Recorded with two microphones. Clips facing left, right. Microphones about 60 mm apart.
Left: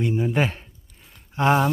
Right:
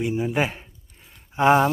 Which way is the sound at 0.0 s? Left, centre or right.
Centre.